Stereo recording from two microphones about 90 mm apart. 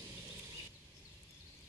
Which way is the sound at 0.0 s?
20° right (ahead or behind).